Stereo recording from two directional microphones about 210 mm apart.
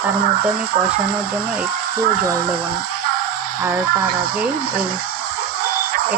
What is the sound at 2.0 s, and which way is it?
Speech, 45° right (ahead or behind).